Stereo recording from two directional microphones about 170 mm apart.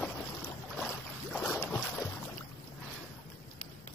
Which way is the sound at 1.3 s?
Centre (ahead or behind).